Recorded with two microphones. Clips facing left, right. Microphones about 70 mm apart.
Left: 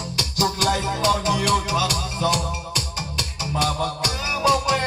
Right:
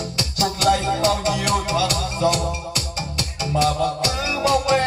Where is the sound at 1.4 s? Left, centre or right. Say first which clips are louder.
Even; right.